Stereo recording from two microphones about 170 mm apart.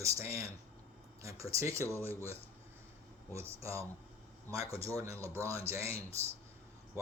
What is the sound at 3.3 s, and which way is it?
Speech, 15° right (ahead or behind).